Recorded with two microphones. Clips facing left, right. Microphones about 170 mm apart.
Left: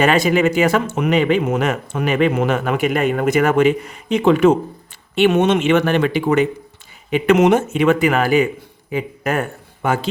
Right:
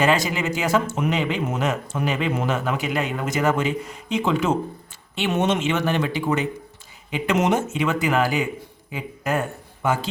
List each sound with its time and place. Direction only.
0.0 s speech: 60° left (ahead or behind)